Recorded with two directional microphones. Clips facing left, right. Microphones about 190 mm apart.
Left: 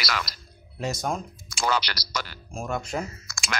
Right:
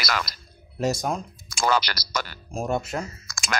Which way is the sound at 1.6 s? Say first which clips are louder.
Right 3 dB; 45° right (ahead or behind).